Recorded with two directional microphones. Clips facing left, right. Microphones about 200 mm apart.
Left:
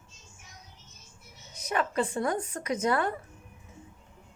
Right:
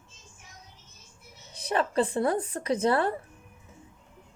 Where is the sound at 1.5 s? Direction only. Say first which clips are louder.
Right 3 dB; 30° right (ahead or behind).